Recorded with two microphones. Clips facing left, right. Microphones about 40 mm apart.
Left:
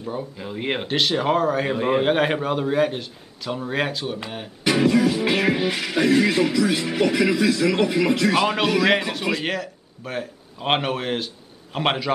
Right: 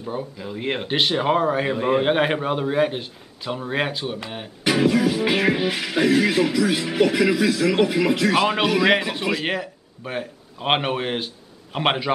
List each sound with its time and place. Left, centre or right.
0.0 s speech: centre
0.4 s speech: centre
0.8 s music: centre
1.7 s a man's voice: centre
2.0 s music: centre
9.2 s a man's voice: centre
9.5 s speech: centre